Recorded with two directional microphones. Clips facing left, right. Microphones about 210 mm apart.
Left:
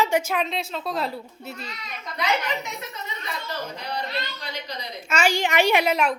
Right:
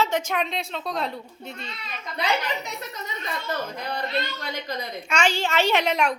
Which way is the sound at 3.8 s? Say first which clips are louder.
Right 2 dB; 50° right (ahead or behind).